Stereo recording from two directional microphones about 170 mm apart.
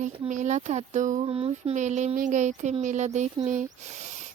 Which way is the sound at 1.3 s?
35° right (ahead or behind).